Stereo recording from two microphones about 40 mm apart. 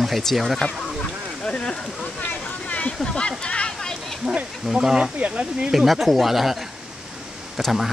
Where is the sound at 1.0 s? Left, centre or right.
Left.